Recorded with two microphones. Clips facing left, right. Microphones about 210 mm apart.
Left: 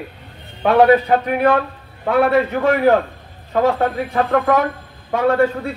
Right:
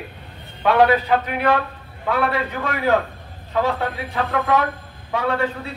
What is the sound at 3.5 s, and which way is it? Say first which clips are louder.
Speech: left 5 dB; 50° left (ahead or behind).